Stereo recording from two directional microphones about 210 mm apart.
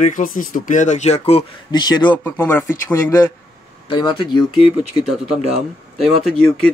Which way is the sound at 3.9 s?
20° left (ahead or behind).